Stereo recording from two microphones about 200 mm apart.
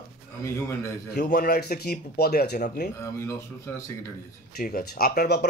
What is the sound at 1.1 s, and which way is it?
A man's voice, 50° left (ahead or behind).